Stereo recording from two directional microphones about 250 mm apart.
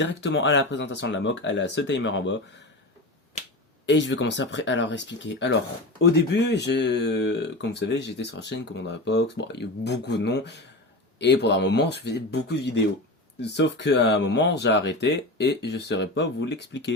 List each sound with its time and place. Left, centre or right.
0.0 s speech: left
3.8 s speech: left